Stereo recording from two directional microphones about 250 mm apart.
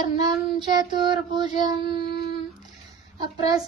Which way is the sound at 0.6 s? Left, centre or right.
Centre.